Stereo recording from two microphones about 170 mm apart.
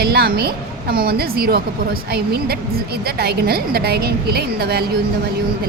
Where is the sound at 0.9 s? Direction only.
65° right (ahead or behind).